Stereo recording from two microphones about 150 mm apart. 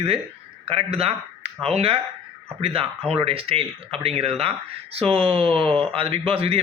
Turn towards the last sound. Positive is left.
turn(degrees=-40)  # may be behind; listen again after turning